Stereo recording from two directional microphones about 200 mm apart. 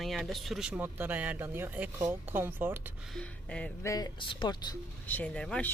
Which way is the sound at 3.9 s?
20° left (ahead or behind).